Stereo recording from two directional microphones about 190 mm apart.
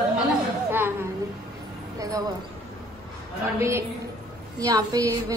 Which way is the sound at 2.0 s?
15° right (ahead or behind).